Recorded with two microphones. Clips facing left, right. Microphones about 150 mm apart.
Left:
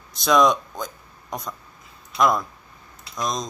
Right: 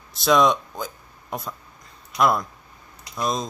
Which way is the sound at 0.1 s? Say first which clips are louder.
Even; centre (ahead or behind).